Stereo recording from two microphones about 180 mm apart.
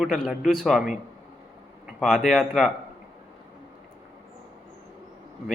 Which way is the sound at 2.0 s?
Centre (ahead or behind).